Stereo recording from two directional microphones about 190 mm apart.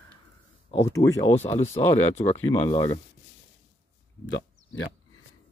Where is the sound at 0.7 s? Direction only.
15° left (ahead or behind).